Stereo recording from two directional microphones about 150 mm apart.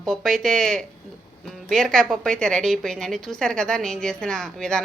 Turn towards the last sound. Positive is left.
turn(degrees=5)  # may be behind; listen again after turning